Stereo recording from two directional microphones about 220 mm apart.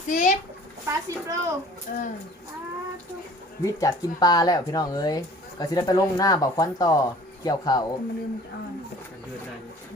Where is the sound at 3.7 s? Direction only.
15° left (ahead or behind).